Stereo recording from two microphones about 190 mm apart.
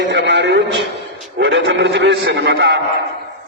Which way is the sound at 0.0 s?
65° right (ahead or behind).